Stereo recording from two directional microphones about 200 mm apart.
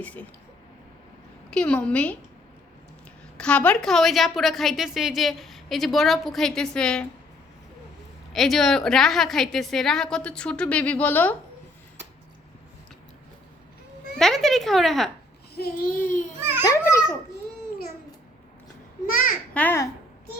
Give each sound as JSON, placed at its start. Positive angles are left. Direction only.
{"t": 0.0, "sound": "a child's voice", "side_deg": 5}
{"t": 1.5, "sound": "a woman's voice", "side_deg": 5}
{"t": 3.3, "sound": "a woman's voice", "side_deg": 5}
{"t": 8.3, "sound": "a woman's voice", "side_deg": 0}
{"t": 14.2, "sound": "a woman's voice", "side_deg": 0}
{"t": 15.5, "sound": "a sound", "side_deg": 50}
{"t": 16.4, "sound": "babbling", "side_deg": -10}
{"t": 16.6, "sound": "a child's voice", "side_deg": 15}
{"t": 19.5, "sound": "a child's voice", "side_deg": 10}